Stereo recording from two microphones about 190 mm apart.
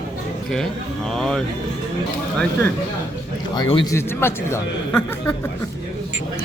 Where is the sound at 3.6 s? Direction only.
25° left (ahead or behind).